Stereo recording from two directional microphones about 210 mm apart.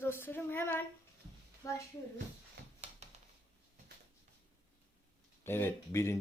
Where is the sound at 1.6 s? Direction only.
15° left (ahead or behind).